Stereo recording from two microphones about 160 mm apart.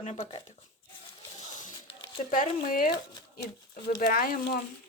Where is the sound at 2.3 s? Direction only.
60° left (ahead or behind).